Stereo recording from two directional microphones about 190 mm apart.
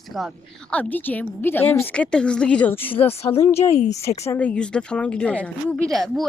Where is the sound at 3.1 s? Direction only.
30° left (ahead or behind).